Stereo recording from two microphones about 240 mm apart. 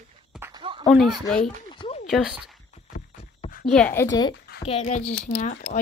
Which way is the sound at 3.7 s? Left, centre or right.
Centre.